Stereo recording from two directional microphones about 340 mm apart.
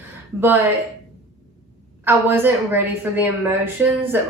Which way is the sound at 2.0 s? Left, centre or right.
Centre.